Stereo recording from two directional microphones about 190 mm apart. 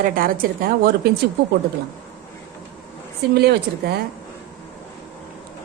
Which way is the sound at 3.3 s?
60° right (ahead or behind).